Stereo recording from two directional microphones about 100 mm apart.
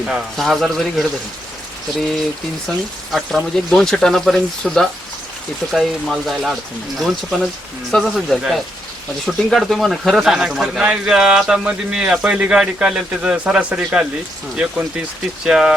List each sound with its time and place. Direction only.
0.0 s speech: centre (ahead or behind)
2.6 s speech: centre (ahead or behind)